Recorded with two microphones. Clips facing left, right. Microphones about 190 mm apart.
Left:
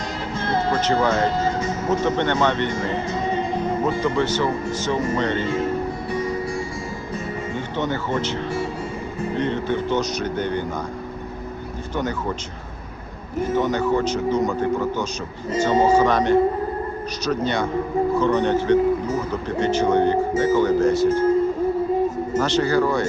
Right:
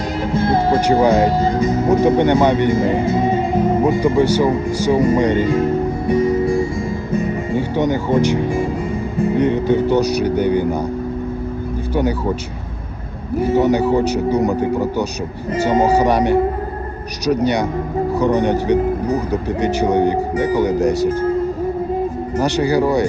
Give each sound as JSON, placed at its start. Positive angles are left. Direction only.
{"t": 0.3, "sound": "music", "side_deg": -10}
{"t": 1.6, "sound": "speech", "side_deg": -10}
{"t": 6.1, "sound": "music", "side_deg": -25}
{"t": 7.5, "sound": "speech", "side_deg": -10}
{"t": 13.4, "sound": "speech", "side_deg": -10}
{"t": 15.6, "sound": "speech", "side_deg": -10}
{"t": 20.9, "sound": "speech", "side_deg": -40}
{"t": 22.4, "sound": "speech", "side_deg": -10}